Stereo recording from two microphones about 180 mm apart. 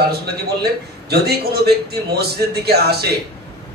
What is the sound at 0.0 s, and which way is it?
A man's voice, 60° right (ahead or behind).